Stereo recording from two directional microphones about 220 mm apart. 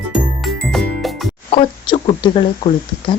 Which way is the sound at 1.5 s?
25° left (ahead or behind).